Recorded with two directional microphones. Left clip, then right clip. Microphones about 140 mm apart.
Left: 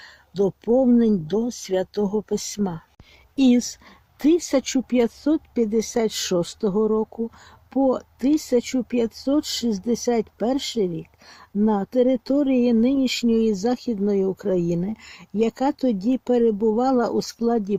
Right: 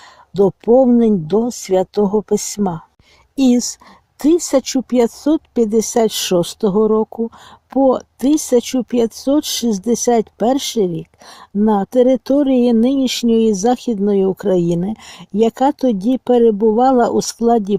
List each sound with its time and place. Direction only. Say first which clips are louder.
0.3 s speech: right 8 dB; 40° right (ahead or behind)
3.3 s speech: right 4 dB; 30° right (ahead or behind); by 17.7 s 50° right (ahead or behind)